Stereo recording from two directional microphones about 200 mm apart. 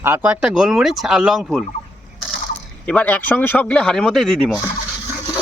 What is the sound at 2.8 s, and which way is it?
Speech, 5° left (ahead or behind).